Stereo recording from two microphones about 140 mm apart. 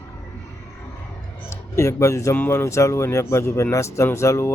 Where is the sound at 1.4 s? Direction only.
20° left (ahead or behind).